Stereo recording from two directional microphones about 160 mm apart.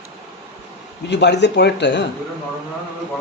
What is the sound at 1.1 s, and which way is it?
Speech, 90° left.